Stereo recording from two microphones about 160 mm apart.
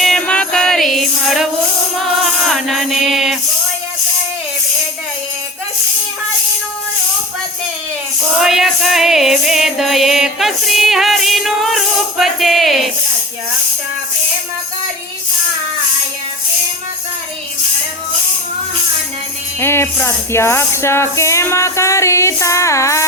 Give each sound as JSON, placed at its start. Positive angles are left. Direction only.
{"t": 0.0, "sound": "music", "side_deg": 5}
{"t": 8.4, "sound": "music", "side_deg": 0}
{"t": 19.5, "sound": "speech", "side_deg": 15}